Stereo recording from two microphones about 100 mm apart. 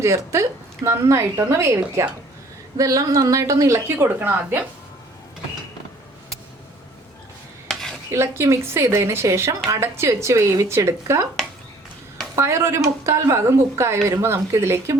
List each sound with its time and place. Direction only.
0.0 s a woman's voice: 30° right (ahead or behind)
7.7 s dishes: 5° left (ahead or behind)
8.1 s speech: 25° right (ahead or behind)
12.4 s speech: 30° right (ahead or behind)